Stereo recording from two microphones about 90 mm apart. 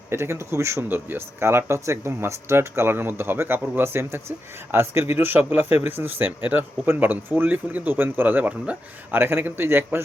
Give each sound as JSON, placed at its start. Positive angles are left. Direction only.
{"t": 0.1, "sound": "a man's voice", "side_deg": -30}